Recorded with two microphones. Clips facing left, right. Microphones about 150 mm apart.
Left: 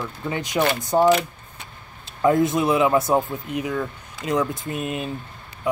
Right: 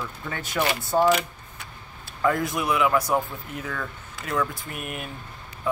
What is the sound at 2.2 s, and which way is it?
Speech, 20° left (ahead or behind).